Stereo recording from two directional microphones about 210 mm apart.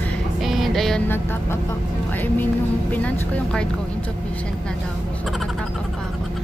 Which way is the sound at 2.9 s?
5° left (ahead or behind).